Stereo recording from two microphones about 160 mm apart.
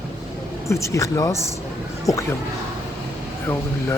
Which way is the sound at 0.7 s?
20° left (ahead or behind).